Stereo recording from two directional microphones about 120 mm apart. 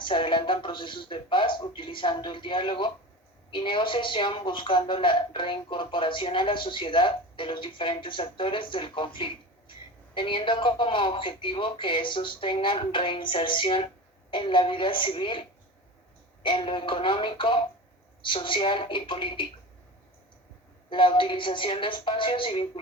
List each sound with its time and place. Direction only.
0.0 s a woman's voice: 45° left (ahead or behind)
20.9 s a woman's voice: 45° left (ahead or behind)